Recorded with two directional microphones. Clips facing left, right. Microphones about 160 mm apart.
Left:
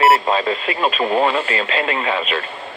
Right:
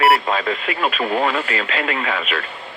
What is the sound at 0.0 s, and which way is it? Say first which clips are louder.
Speech: left 2 dB; 25° left (ahead or behind).